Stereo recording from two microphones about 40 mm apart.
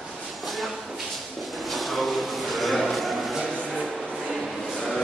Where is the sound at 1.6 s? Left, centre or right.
Centre.